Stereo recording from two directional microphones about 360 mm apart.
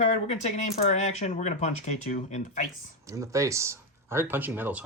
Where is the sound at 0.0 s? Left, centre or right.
Centre.